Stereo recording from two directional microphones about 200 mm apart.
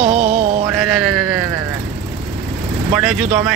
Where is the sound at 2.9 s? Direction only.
5° right (ahead or behind).